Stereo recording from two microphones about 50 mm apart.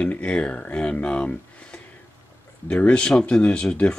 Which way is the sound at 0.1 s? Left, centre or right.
Left.